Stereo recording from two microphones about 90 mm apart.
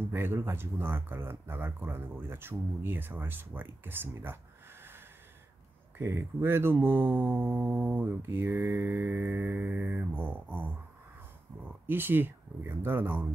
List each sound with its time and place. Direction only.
0.0 s mantra: 25° right (ahead or behind)
5.9 s mantra: 25° right (ahead or behind)